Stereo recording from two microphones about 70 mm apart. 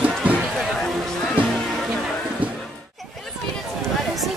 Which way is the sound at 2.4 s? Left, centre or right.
Centre.